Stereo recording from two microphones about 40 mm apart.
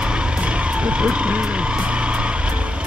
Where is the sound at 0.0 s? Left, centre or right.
Right.